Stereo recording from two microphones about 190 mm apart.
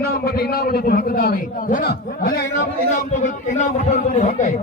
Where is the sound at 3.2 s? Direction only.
40° left (ahead or behind).